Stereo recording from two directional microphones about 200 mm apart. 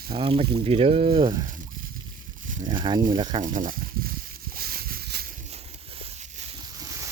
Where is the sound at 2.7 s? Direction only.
25° right (ahead or behind).